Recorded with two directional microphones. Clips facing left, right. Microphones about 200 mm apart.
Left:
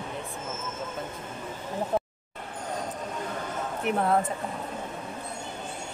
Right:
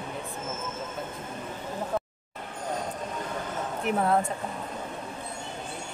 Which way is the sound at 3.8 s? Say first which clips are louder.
Even; centre (ahead or behind).